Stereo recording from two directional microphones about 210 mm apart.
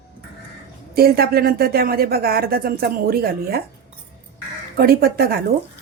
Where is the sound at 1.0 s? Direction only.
45° right (ahead or behind).